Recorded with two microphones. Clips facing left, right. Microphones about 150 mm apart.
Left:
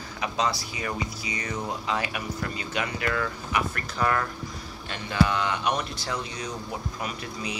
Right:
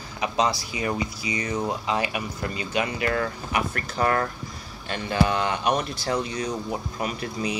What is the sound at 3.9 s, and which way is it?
Speech, 40° right (ahead or behind).